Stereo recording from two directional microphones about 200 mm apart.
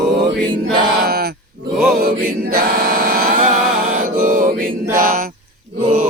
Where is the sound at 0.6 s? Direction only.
50° right (ahead or behind).